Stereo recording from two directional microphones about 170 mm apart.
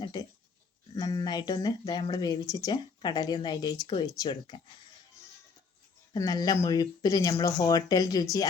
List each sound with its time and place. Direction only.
0.0 s speech: 25° left (ahead or behind)
6.1 s speech: 20° left (ahead or behind)